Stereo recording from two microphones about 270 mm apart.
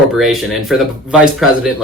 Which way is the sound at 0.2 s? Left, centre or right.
Centre.